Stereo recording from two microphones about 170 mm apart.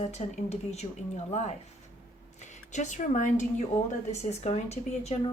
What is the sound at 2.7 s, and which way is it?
Speech, 45° left (ahead or behind).